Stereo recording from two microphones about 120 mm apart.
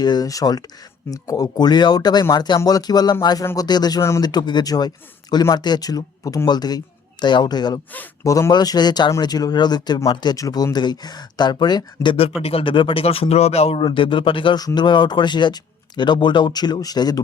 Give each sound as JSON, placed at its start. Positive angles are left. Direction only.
{"t": 0.0, "sound": "speech", "side_deg": 35}
{"t": 12.4, "sound": "speech", "side_deg": 55}